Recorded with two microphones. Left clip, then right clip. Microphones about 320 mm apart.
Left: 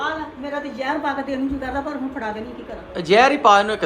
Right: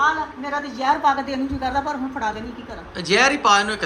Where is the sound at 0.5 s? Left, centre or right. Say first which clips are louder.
Right 4 dB; centre.